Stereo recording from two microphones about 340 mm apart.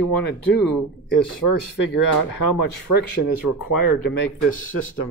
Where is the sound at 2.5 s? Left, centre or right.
Left.